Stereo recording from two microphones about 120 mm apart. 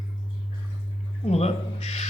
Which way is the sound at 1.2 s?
65° left (ahead or behind).